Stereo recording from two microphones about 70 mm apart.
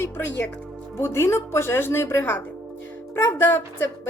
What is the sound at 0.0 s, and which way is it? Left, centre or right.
Speech, left.